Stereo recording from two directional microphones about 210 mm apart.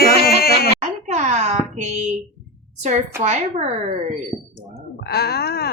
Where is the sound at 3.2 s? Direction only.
30° right (ahead or behind).